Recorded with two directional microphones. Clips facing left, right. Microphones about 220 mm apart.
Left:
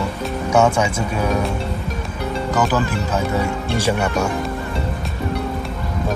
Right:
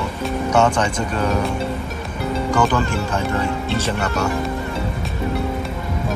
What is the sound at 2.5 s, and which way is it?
Speech, 5° left (ahead or behind).